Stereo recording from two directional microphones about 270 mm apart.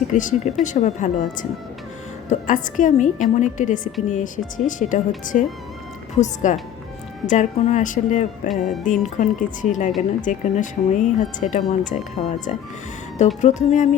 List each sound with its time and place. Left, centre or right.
0.1 s speech: left
2.5 s speech: left
8.4 s music: centre
8.8 s speech: left